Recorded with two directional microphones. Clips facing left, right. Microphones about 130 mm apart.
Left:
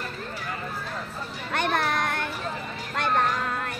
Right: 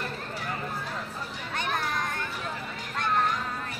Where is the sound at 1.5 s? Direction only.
75° left (ahead or behind).